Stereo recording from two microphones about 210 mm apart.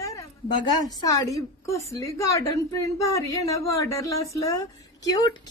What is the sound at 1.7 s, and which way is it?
Speech, 15° left (ahead or behind).